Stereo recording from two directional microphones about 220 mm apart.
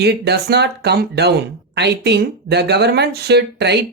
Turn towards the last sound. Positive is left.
turn(degrees=-50)  # may be behind; listen again after turning